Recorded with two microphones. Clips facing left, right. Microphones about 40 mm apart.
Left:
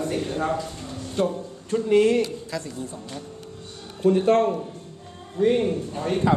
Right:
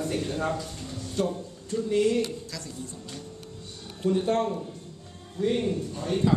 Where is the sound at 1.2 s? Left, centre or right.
Left.